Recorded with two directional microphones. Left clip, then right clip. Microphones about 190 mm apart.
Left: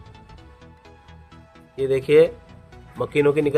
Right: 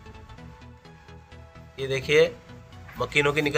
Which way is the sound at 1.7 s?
55° left (ahead or behind).